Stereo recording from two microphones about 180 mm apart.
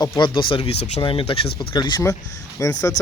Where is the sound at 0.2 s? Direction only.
25° left (ahead or behind).